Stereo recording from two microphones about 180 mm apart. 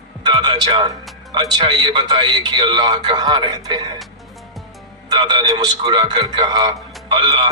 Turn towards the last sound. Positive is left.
turn(degrees=-25)  # may be behind; listen again after turning